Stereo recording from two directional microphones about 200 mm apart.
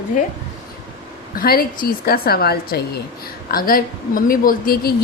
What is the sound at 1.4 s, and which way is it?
A woman's voice, 45° left (ahead or behind).